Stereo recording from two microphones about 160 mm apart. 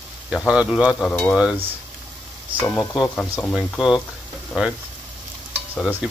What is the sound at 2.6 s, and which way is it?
Sizzle, 20° left (ahead or behind).